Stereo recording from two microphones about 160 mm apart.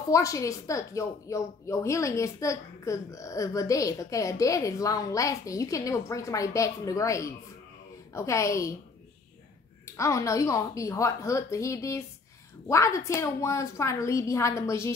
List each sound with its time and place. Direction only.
0.1 s a woman's voice: 20° left (ahead or behind)
9.8 s a woman's voice: 20° left (ahead or behind)